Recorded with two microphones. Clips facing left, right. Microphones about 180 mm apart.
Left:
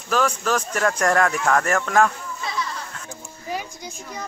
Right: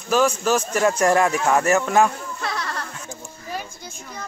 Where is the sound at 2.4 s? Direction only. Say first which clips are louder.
Right 1 dB; 70° right (ahead or behind).